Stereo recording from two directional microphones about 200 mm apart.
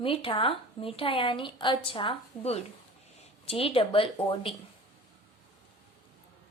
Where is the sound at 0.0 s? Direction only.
25° left (ahead or behind).